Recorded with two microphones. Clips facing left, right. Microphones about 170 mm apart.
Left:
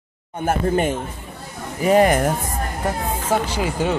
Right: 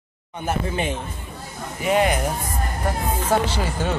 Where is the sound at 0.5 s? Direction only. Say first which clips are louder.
Left 5 dB; 50° left (ahead or behind).